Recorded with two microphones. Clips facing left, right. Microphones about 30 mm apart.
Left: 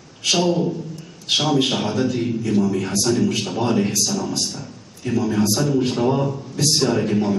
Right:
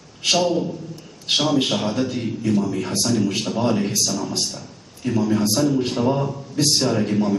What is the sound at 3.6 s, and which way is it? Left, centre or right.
Speech, centre.